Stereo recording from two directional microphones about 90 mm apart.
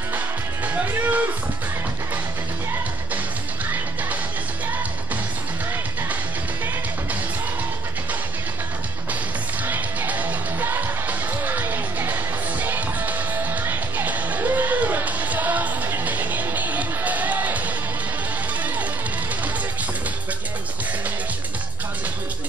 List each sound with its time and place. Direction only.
0.8 s music: 20° right (ahead or behind)
9.7 s music: 20° right (ahead or behind)